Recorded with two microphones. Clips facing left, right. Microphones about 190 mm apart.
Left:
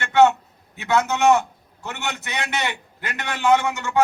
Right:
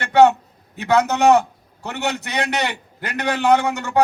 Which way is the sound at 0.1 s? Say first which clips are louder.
Right 3 dB; 40° right (ahead or behind).